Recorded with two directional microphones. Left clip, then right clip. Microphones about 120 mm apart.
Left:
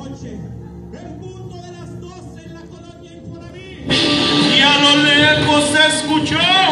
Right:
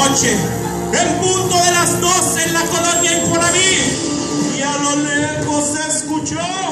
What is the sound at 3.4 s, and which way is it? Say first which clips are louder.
Music: right 17 dB; 5° left (ahead or behind).